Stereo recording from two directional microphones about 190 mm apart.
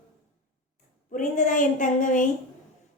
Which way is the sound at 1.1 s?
40° left (ahead or behind).